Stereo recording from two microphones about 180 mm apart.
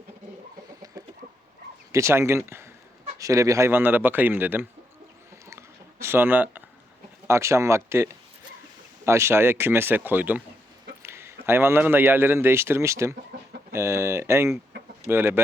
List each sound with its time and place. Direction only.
0.9 s chicken: 20° right (ahead or behind)
1.9 s speech: 15° right (ahead or behind)
5.5 s a sound: 15° right (ahead or behind)
7.3 s a man's voice: 15° right (ahead or behind)